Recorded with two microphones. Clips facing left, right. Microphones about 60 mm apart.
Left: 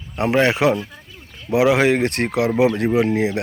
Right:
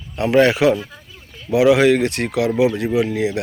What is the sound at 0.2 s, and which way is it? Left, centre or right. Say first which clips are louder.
Speech: right 2 dB; left.